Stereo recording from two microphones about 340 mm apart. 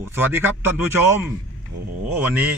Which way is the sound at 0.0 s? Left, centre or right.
Centre.